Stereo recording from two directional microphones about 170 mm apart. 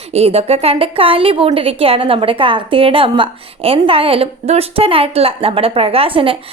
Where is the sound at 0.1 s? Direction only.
35° right (ahead or behind).